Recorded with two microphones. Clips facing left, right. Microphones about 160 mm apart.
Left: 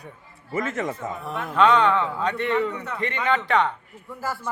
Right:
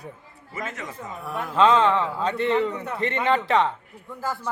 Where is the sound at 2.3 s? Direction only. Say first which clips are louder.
Right 3 dB; 30° right (ahead or behind).